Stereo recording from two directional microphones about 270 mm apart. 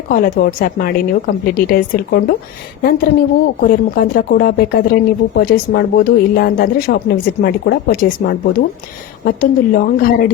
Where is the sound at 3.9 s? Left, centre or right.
Left.